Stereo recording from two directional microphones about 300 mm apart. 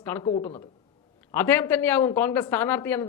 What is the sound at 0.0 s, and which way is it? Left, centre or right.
Speech, centre.